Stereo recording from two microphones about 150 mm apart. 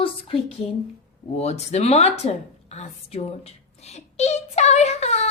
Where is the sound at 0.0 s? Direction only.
35° left (ahead or behind).